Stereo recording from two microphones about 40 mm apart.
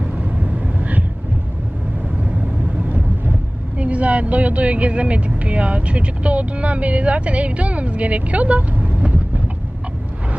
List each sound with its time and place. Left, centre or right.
0.0 s vehicle: right
2.8 s boat: right
3.8 s speech: right